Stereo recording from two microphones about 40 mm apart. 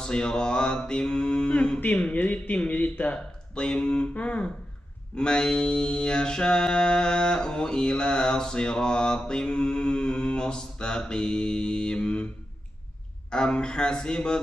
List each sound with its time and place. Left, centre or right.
0.0 s mantra: left
1.9 s speech: left
3.6 s a sound: centre
3.9 s speech: left
5.1 s mantra: left
13.3 s mantra: left